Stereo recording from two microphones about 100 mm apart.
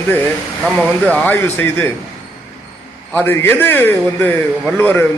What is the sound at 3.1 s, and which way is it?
A man's voice, 20° left (ahead or behind).